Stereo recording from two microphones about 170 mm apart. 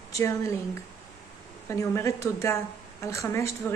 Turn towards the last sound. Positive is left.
turn(degrees=15)  # may be behind; listen again after turning